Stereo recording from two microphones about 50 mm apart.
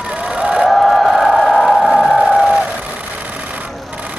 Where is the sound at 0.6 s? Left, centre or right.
Centre.